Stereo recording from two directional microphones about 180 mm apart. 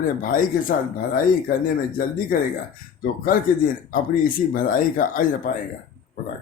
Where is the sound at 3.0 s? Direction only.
50° left (ahead or behind).